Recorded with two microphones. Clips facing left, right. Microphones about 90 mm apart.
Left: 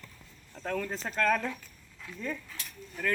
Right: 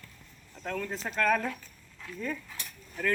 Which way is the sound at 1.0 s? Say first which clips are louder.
Right 1 dB; 5° right (ahead or behind).